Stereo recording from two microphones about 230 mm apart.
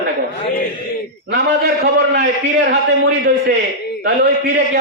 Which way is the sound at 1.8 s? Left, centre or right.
Right.